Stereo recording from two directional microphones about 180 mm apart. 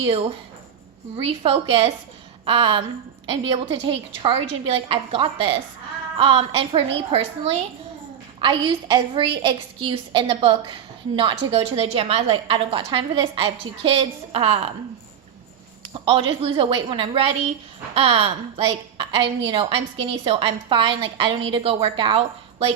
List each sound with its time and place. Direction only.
1.1 s a woman's voice: 30° right (ahead or behind)
15.9 s a woman's voice: 30° right (ahead or behind)